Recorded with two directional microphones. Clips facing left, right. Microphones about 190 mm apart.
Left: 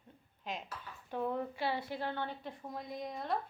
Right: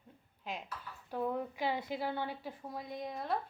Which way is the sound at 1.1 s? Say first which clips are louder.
Even; 10° right (ahead or behind).